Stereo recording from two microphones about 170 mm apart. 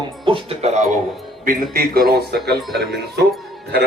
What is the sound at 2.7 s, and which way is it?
Speech, centre (ahead or behind).